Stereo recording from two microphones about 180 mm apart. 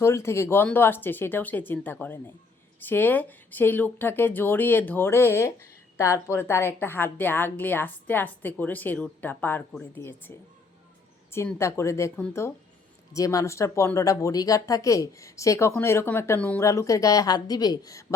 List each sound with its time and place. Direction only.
0.0 s speech: 15° left (ahead or behind)